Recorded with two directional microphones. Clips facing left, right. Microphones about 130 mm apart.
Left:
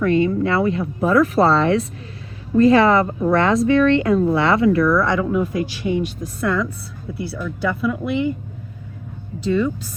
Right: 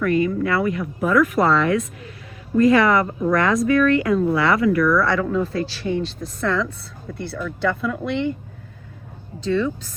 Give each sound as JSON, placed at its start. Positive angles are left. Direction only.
{"t": 0.0, "sound": "a woman's voice", "side_deg": 25}
{"t": 9.5, "sound": "speech", "side_deg": 10}